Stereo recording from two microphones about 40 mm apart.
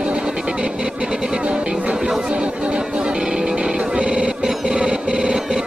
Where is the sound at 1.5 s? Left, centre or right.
Right.